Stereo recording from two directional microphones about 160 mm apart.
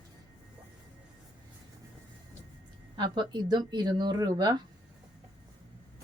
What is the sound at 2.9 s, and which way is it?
Speech, 30° right (ahead or behind).